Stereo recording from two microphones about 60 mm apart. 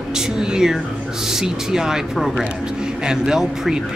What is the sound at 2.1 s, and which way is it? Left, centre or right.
Speech, centre.